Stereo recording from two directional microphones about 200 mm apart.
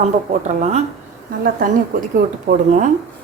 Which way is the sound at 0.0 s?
35° right (ahead or behind).